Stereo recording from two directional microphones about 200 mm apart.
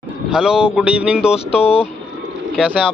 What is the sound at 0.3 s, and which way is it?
Speech, 5° right (ahead or behind).